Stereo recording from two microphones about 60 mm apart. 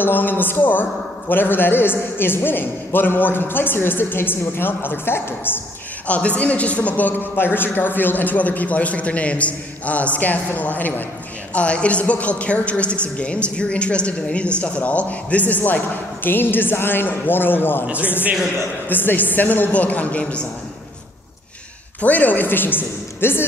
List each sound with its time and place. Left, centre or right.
0.0 s a man's voice: left
6.0 s a man's voice: left
18.9 s a man's voice: left
22.0 s a man's voice: left